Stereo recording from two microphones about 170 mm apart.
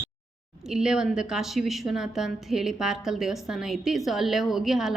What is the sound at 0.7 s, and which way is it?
A woman's voice, 5° right (ahead or behind).